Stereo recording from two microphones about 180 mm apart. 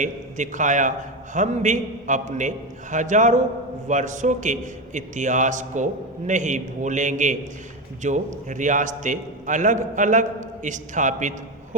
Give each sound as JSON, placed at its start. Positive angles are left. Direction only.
{"t": 0.0, "sound": "a man's voice", "side_deg": -45}